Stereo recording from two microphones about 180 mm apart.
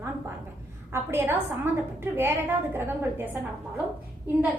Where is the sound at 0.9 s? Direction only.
15° right (ahead or behind).